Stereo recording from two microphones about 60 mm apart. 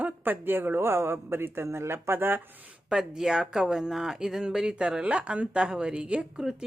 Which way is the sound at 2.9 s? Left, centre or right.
Centre.